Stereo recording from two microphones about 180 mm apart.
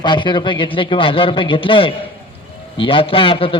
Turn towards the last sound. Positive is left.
turn(degrees=30)  # may be behind; listen again after turning